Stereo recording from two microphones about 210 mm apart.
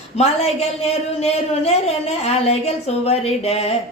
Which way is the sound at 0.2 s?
30° left (ahead or behind).